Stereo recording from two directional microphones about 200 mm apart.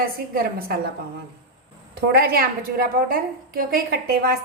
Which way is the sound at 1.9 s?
50° right (ahead or behind).